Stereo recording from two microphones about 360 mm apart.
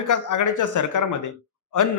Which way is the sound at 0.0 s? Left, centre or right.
Left.